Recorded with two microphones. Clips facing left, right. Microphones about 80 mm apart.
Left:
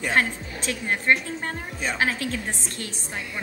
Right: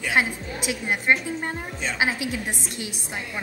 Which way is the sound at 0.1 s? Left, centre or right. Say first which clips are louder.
Right 1 dB; centre.